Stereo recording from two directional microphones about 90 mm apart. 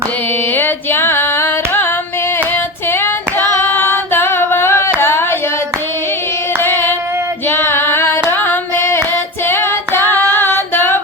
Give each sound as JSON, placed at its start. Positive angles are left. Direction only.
{"t": 0.5, "sound": "singing", "side_deg": 25}
{"t": 3.8, "sound": "singing", "side_deg": 25}
{"t": 4.9, "sound": "a sound", "side_deg": 25}
{"t": 6.6, "sound": "singing", "side_deg": 25}
{"t": 9.5, "sound": "female singing", "side_deg": 25}
{"t": 10.3, "sound": "a sound", "side_deg": 25}